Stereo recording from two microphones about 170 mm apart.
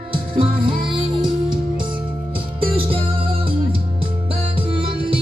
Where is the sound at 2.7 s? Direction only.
30° right (ahead or behind).